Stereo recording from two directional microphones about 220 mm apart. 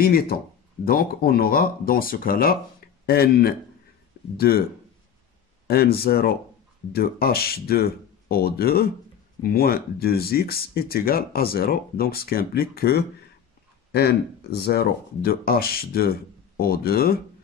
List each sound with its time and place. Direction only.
0.0 s speech: 45° left (ahead or behind)
5.7 s speech: 45° left (ahead or behind)